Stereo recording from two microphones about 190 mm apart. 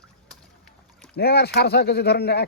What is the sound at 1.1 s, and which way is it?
Speech, 55° left (ahead or behind).